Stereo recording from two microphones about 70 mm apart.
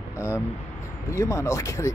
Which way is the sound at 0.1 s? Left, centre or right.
Left.